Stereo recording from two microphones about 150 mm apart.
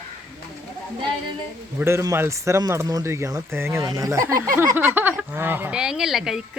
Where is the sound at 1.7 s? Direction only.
15° right (ahead or behind).